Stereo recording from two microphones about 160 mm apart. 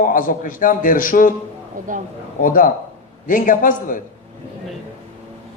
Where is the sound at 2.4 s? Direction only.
60° left (ahead or behind).